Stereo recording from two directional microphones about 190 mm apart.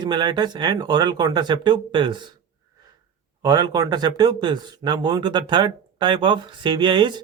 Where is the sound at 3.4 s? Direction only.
20° right (ahead or behind).